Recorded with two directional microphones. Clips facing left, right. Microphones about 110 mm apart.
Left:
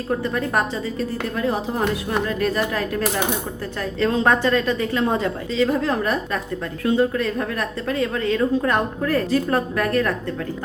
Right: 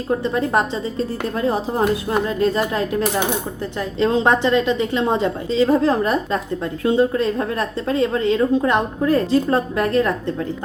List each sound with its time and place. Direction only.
0.1 s a woman's voice: 25° right (ahead or behind)